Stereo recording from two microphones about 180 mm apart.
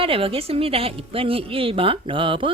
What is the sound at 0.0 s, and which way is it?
A woman's voice, 30° right (ahead or behind).